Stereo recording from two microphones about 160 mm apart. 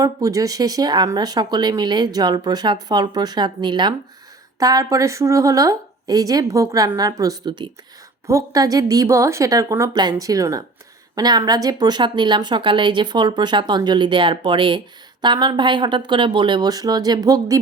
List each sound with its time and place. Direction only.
0.0 s speech: 20° right (ahead or behind)